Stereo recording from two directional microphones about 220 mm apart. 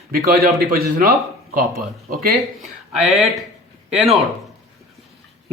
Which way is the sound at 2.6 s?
Centre (ahead or behind).